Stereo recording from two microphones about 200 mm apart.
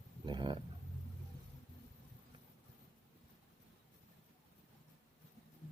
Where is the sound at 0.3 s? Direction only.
20° right (ahead or behind).